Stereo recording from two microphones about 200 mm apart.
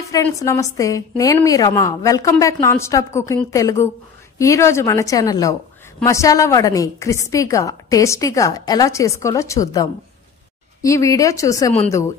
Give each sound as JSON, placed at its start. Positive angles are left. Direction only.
{"t": 0.1, "sound": "a woman's voice", "side_deg": 15}